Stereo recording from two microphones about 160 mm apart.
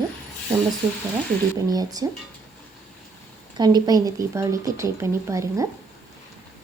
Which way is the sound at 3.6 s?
25° right (ahead or behind).